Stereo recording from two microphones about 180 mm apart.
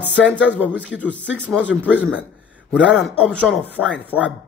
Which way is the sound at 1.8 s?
10° right (ahead or behind).